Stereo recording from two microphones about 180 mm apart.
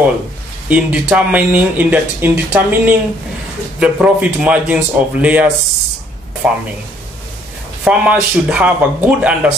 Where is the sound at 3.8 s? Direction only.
5° right (ahead or behind).